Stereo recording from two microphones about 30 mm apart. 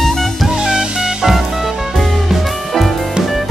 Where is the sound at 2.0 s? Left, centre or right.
Centre.